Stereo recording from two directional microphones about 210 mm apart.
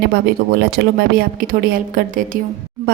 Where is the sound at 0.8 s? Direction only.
50° right (ahead or behind).